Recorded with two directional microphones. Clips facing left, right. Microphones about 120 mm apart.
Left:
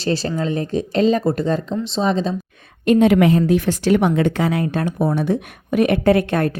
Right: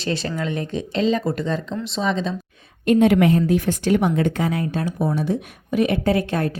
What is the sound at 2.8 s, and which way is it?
A woman's voice, 90° left.